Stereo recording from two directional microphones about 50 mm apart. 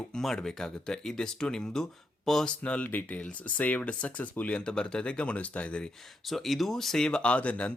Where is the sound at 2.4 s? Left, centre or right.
Left.